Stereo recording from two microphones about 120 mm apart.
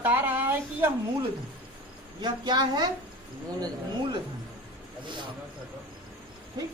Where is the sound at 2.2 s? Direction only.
35° right (ahead or behind).